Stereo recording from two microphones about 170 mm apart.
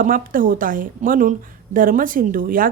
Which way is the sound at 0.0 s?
55° right (ahead or behind).